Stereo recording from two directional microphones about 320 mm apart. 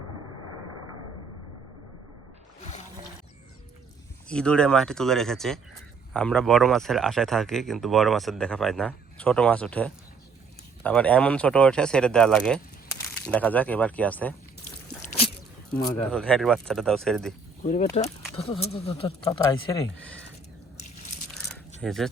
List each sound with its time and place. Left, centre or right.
0.4 s a sound: right
4.3 s speech: centre
16.1 s speech: centre
17.6 s speech: left
21.8 s speech: centre